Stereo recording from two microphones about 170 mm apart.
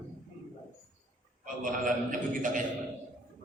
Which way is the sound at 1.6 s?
50° right (ahead or behind).